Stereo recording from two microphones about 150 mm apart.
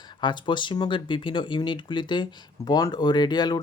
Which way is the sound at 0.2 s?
30° left (ahead or behind).